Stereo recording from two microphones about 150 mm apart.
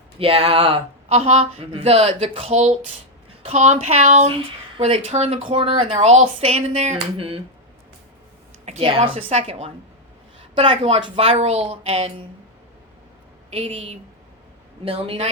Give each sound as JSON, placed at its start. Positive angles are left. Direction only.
{"t": 0.2, "sound": "speech", "side_deg": -40}
{"t": 9.0, "sound": "speech", "side_deg": -45}
{"t": 13.5, "sound": "speech", "side_deg": -40}